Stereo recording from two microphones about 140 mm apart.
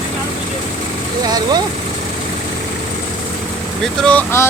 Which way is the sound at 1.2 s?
30° right (ahead or behind).